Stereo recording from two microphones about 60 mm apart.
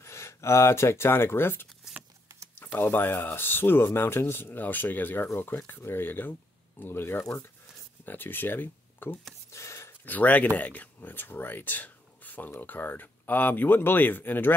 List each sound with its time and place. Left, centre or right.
0.0 s speech: left
9.5 s a sound: left
10.0 s speech: left